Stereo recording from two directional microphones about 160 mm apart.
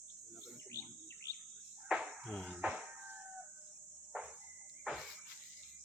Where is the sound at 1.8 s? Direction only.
5° right (ahead or behind).